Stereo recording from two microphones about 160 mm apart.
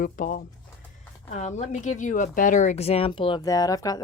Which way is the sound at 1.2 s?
50° left (ahead or behind).